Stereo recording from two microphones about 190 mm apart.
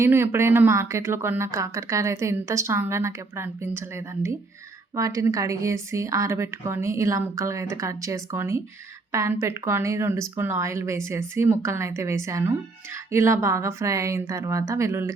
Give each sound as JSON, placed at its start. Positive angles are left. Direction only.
{"t": 0.0, "sound": "speech", "side_deg": -10}